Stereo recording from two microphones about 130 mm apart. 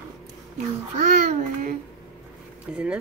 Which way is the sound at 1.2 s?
90° right.